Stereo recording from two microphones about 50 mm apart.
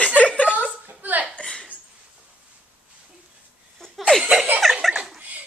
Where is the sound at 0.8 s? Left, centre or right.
Right.